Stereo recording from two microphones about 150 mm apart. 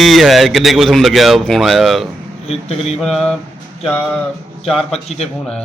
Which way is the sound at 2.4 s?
45° left (ahead or behind).